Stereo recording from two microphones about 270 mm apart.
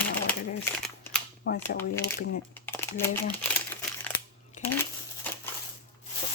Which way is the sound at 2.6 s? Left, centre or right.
Centre.